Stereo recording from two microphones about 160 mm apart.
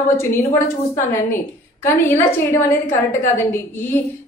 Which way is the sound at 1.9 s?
15° left (ahead or behind).